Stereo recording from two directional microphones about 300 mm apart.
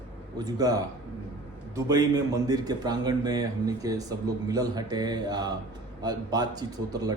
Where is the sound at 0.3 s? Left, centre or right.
Centre.